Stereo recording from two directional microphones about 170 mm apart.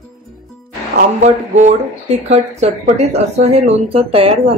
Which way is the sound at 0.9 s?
45° right (ahead or behind).